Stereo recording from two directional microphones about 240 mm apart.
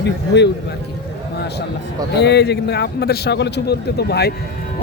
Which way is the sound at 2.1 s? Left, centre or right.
Left.